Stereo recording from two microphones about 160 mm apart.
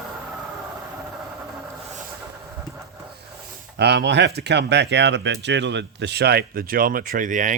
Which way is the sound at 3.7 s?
90° right.